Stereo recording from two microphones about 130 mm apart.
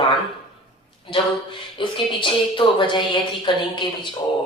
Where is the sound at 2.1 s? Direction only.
40° left (ahead or behind).